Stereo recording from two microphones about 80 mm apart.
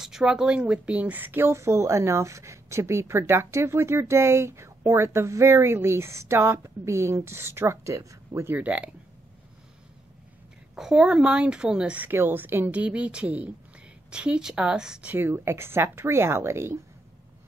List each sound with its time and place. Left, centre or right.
0.0 s speech: centre; by 8.5 s right
8.5 s a woman's voice: centre
10.8 s a woman's voice: centre
15.0 s speech: right